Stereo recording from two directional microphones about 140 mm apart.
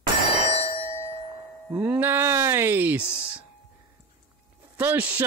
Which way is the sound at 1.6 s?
10° right (ahead or behind).